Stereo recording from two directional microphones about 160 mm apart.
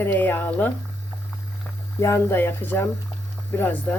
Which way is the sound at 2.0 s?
15° left (ahead or behind).